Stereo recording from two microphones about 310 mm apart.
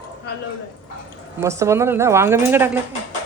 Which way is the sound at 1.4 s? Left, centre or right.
Centre.